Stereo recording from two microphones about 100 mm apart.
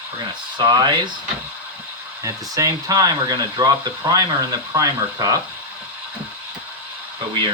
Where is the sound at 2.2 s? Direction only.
35° right (ahead or behind).